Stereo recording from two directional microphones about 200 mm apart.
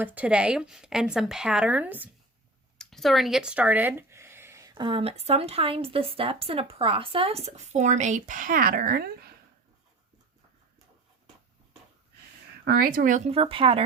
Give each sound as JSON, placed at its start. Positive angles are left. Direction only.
{"t": 0.0, "sound": "speech", "side_deg": -5}
{"t": 12.6, "sound": "speech", "side_deg": -50}